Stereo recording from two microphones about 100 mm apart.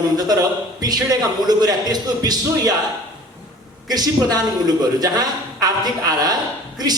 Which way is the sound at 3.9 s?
40° right (ahead or behind).